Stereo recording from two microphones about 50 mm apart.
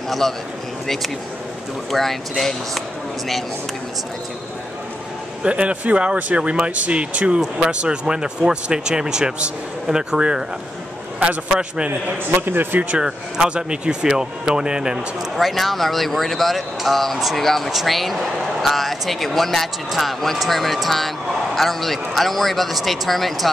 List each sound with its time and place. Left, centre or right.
1.9 s speech: centre
5.4 s speech: right
11.4 s speech: centre
12.3 s a man's voice: right
12.9 s speech: centre
15.3 s speech: centre